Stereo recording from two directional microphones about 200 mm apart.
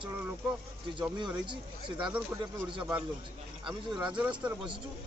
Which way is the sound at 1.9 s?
5° right (ahead or behind).